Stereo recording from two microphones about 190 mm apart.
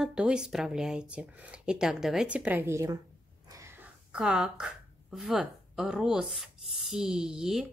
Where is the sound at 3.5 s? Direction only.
15° right (ahead or behind).